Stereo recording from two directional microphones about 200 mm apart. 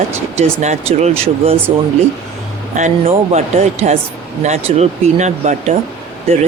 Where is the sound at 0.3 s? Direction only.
35° right (ahead or behind).